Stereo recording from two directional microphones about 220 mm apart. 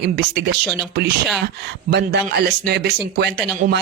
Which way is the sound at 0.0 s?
50° right (ahead or behind).